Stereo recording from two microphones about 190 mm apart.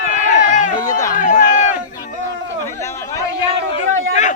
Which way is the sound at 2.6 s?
15° left (ahead or behind).